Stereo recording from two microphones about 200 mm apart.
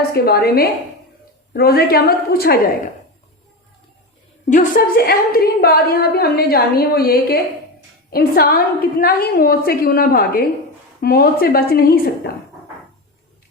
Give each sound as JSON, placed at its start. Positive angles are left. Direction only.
{"t": 0.1, "sound": "a woman's voice", "side_deg": 50}
{"t": 4.4, "sound": "a woman's voice", "side_deg": 40}